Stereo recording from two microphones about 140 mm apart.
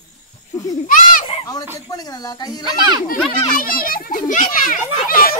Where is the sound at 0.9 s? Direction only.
75° left (ahead or behind).